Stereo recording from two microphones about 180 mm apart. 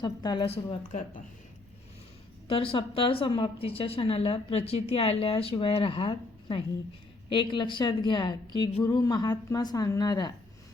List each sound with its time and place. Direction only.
0.0 s a woman's voice: 25° left (ahead or behind)
2.5 s a woman's voice: 30° left (ahead or behind)